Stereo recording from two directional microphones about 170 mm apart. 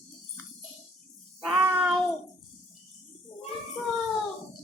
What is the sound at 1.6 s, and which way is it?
Child singing, 10° right (ahead or behind).